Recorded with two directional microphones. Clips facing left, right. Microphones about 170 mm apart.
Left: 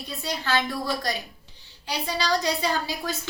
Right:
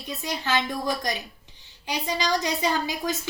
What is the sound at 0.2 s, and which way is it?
A woman's voice, 20° right (ahead or behind).